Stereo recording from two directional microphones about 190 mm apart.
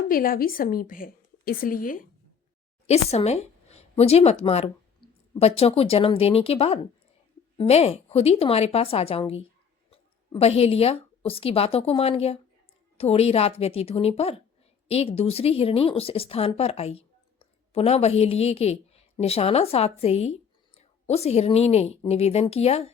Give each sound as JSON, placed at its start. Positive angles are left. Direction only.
{"t": 0.1, "sound": "a woman's voice", "side_deg": 50}
{"t": 2.8, "sound": "a woman's voice", "side_deg": 35}